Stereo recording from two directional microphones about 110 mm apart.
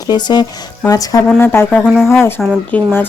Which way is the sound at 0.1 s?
40° left (ahead or behind).